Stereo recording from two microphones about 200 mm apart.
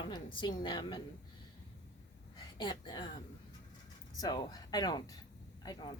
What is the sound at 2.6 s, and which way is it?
Speech, 20° left (ahead or behind).